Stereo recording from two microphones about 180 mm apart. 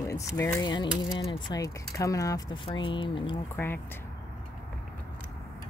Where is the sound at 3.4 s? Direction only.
10° left (ahead or behind).